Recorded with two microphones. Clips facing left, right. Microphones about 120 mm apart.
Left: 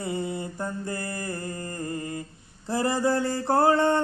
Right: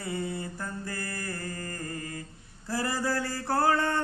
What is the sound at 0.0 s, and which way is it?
Mantra, 20° left (ahead or behind).